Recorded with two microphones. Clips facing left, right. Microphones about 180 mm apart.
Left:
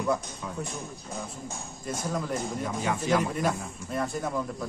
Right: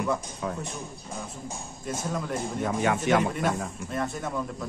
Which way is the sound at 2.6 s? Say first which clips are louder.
Right 4 dB; 65° right (ahead or behind).